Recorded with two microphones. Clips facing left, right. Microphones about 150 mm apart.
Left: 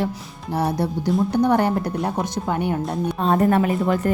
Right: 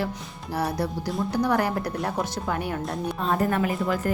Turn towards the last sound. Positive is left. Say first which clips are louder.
# left 5 dB
turn(degrees=30)  # may be behind; listen again after turning